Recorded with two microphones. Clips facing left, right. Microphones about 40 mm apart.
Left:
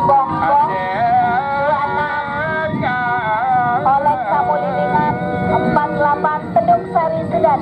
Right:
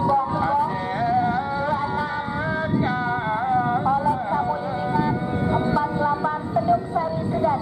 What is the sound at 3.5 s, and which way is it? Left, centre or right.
Music, left.